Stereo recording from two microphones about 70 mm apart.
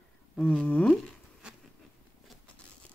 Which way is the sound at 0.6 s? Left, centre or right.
Centre.